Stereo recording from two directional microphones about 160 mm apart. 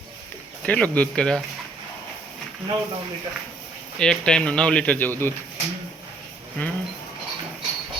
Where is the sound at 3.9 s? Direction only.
5° left (ahead or behind).